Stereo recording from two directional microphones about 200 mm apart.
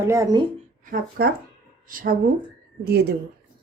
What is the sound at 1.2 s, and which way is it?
A woman's voice, 50° right (ahead or behind).